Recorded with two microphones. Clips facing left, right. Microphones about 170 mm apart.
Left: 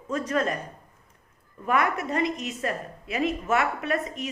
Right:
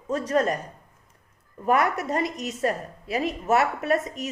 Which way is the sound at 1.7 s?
40° right (ahead or behind).